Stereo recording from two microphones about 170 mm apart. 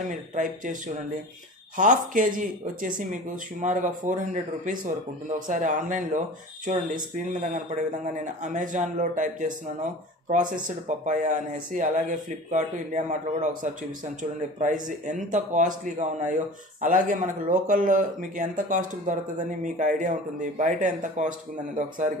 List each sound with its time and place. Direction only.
0.1 s speech: 50° right (ahead or behind)
1.8 s speech: 50° right (ahead or behind)
11.1 s speech: 50° right (ahead or behind)